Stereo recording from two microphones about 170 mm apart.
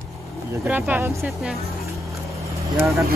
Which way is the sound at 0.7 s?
10° right (ahead or behind).